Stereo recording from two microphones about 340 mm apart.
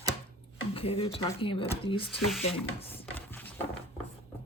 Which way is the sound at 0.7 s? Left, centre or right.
Centre.